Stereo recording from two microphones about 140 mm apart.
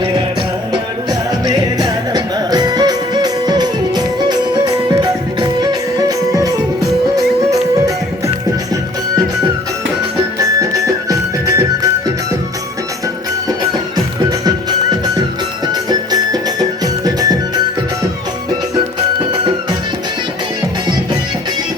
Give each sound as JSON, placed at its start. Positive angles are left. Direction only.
{"t": 1.5, "sound": "music", "side_deg": -30}
{"t": 10.3, "sound": "music", "side_deg": -25}
{"t": 13.7, "sound": "music", "side_deg": -30}